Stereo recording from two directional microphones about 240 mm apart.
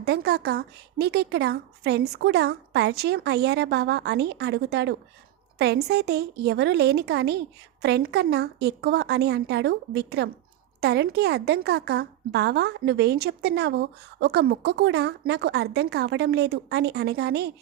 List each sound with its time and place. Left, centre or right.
0.0 s a woman's voice: right